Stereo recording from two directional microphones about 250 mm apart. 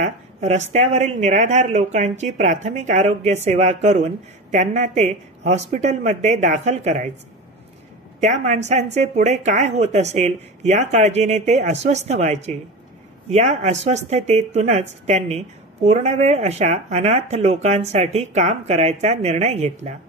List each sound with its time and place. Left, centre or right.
0.0 s speech: right
8.2 s speech: right